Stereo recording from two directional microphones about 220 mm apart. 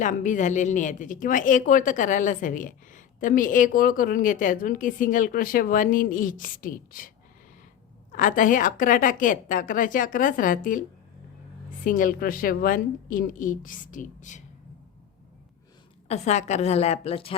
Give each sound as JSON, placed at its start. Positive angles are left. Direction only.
{"t": 0.0, "sound": "a woman's voice", "side_deg": 35}
{"t": 8.1, "sound": "a woman's voice", "side_deg": 35}
{"t": 11.9, "sound": "a woman's voice", "side_deg": 40}
{"t": 16.0, "sound": "a woman's voice", "side_deg": 30}